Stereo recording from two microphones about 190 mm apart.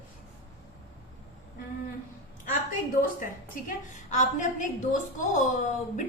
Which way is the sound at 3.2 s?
45° left (ahead or behind).